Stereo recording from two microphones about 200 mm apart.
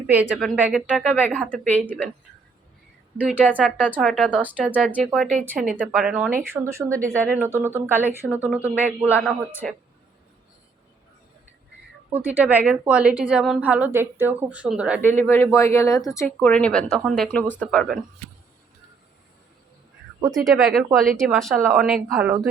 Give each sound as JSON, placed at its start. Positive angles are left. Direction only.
{"t": 0.2, "sound": "speech", "side_deg": -5}
{"t": 1.1, "sound": "speech", "side_deg": 10}
{"t": 3.2, "sound": "speech", "side_deg": -5}
{"t": 3.4, "sound": "speech", "side_deg": 10}
{"t": 4.7, "sound": "a woman's voice", "side_deg": 10}
{"t": 12.1, "sound": "a woman's voice", "side_deg": -10}
{"t": 15.0, "sound": "speech", "side_deg": 10}
{"t": 20.3, "sound": "speech", "side_deg": 0}